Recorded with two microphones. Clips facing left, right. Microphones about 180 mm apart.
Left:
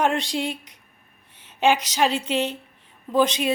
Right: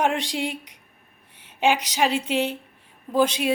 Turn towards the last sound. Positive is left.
turn(degrees=-10)  # may be behind; listen again after turning